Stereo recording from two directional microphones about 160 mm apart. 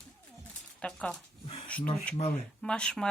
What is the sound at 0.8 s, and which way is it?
A woman's voice, 5° left (ahead or behind).